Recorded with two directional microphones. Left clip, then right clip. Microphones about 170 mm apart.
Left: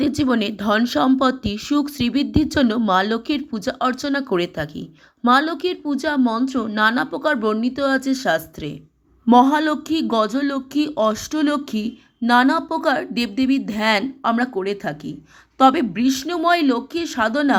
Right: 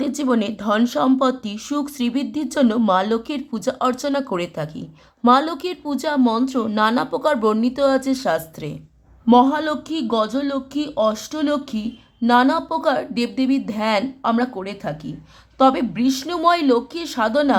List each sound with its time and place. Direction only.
0.0 s speech: 15° left (ahead or behind)
9.3 s speech: 20° left (ahead or behind)